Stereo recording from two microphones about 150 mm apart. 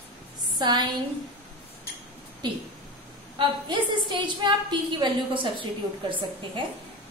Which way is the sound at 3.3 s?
30° right (ahead or behind).